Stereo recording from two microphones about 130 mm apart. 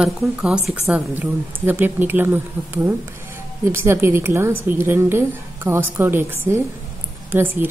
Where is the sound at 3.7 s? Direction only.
20° right (ahead or behind).